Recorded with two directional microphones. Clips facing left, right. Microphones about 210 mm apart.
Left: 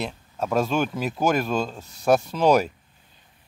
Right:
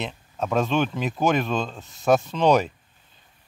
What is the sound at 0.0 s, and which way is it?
Speech, 5° left (ahead or behind).